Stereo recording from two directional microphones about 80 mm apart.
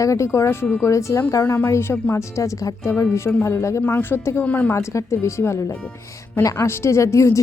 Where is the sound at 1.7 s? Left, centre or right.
Left.